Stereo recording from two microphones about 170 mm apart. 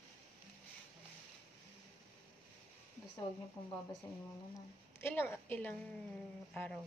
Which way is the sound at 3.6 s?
30° left (ahead or behind).